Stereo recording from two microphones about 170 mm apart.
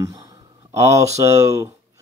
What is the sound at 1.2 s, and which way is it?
Speech, 20° right (ahead or behind).